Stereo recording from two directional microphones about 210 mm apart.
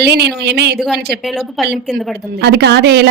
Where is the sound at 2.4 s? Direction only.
55° right (ahead or behind).